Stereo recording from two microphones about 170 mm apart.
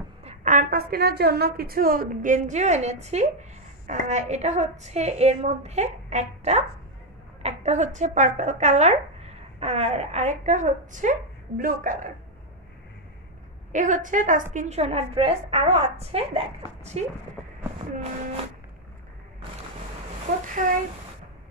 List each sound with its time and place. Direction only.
0.2 s a woman's voice: 40° right (ahead or behind)
13.7 s a woman's voice: 45° right (ahead or behind)
20.6 s a woman's voice: 50° right (ahead or behind)